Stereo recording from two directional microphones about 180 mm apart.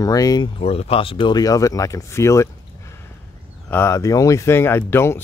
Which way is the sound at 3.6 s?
15° left (ahead or behind).